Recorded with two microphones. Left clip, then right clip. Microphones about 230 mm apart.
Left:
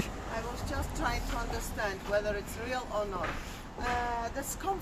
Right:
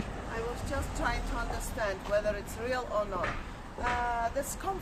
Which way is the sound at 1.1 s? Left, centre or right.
Centre.